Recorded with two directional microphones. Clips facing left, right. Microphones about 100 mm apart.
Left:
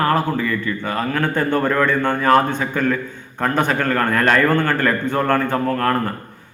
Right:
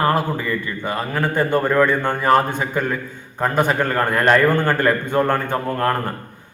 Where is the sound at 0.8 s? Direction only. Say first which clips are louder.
Even; 15° right (ahead or behind).